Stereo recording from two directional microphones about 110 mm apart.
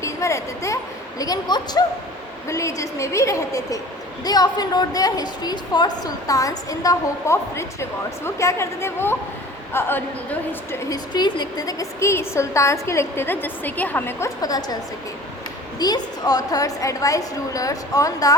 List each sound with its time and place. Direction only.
0.0 s speech: 25° left (ahead or behind)
1.2 s a woman's voice: 40° left (ahead or behind)
2.5 s a woman's voice: 30° left (ahead or behind)
10.8 s a woman's voice: 40° left (ahead or behind); by 14.3 s 20° left (ahead or behind)
14.4 s a woman's voice: 35° left (ahead or behind)
15.8 s a woman's voice: 35° left (ahead or behind)